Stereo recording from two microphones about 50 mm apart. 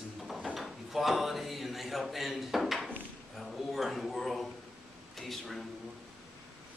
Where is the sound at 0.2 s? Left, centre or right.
Centre.